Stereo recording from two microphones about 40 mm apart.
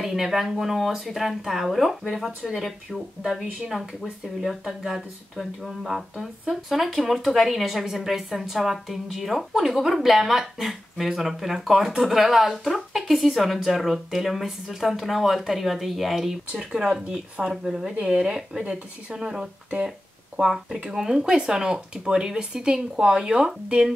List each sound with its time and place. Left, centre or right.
0.0 s a woman's voice: centre